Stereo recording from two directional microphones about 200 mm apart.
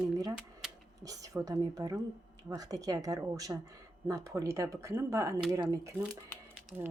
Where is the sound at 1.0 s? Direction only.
15° right (ahead or behind).